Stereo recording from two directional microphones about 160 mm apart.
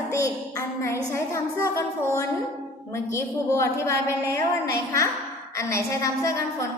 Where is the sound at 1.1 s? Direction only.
15° left (ahead or behind).